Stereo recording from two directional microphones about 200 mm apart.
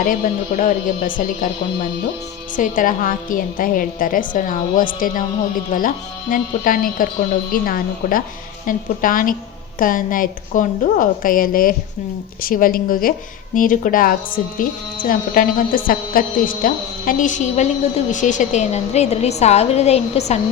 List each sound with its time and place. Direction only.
0.0 s a woman's voice: 40° left (ahead or behind)
2.6 s a woman's voice: 40° left (ahead or behind)